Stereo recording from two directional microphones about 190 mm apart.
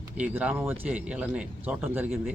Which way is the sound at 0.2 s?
5° right (ahead or behind).